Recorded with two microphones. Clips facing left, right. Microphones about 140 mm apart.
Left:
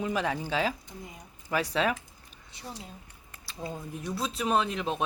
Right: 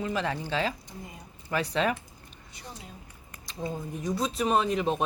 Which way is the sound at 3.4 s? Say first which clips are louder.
Right 3 dB; centre (ahead or behind).